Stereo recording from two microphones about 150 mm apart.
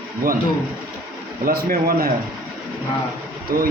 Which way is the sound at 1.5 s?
85° right.